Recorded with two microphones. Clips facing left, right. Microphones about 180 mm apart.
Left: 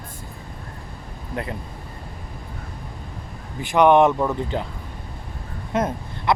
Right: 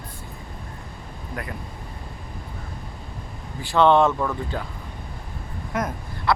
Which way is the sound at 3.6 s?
15° left (ahead or behind).